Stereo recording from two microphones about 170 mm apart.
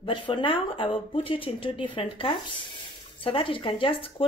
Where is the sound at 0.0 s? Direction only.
30° left (ahead or behind).